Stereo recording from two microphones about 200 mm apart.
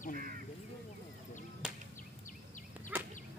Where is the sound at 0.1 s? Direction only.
45° right (ahead or behind).